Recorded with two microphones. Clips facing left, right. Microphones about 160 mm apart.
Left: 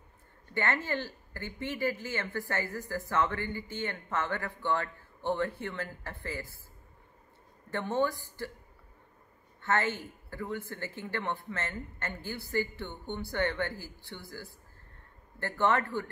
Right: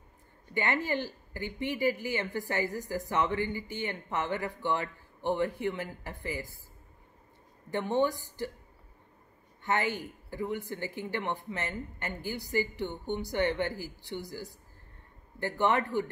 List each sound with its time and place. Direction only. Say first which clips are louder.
0.6 s speech: right 2 dB; 15° right (ahead or behind)
7.7 s speech: right 2 dB; 15° right (ahead or behind)
9.6 s speech: even; 15° right (ahead or behind)